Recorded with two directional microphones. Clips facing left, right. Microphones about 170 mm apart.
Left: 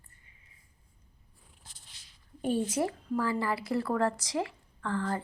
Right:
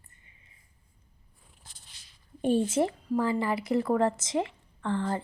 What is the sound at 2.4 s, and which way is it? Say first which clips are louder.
Speech: right 4 dB; 25° right (ahead or behind).